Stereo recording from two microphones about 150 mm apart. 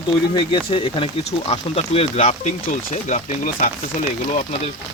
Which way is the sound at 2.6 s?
55° left (ahead or behind).